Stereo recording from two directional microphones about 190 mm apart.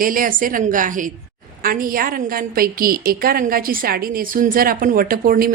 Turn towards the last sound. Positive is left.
turn(degrees=-50)  # may be behind; listen again after turning